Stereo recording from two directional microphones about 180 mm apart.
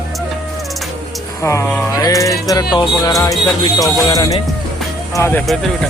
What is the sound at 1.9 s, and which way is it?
Music, 20° left (ahead or behind).